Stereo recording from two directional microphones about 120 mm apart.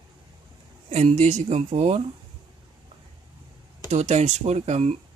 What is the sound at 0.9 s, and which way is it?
A woman's voice, 65° right (ahead or behind).